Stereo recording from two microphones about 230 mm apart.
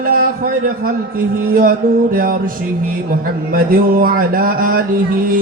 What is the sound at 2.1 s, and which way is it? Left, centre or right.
Speech, right.